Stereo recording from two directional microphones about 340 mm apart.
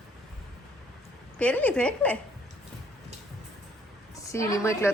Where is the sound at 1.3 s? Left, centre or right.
Centre.